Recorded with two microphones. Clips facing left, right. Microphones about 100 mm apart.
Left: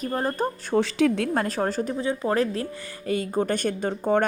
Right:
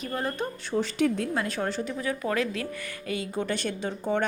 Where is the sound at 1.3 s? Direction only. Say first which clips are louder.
Left 4 dB; 45° left (ahead or behind).